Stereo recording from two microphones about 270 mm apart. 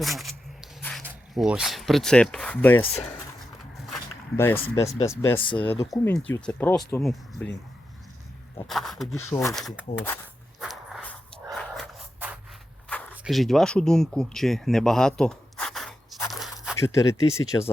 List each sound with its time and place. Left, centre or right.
0.0 s speech: centre
0.8 s a sound: centre
1.0 s speech: centre
4.7 s speech: centre
8.6 s speech: centre
9.3 s speech: centre
9.6 s speech: centre
10.6 s walk: centre
11.8 s a sound: centre
16.7 s speech: centre